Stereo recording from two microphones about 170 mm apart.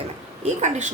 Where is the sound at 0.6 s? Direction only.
45° right (ahead or behind).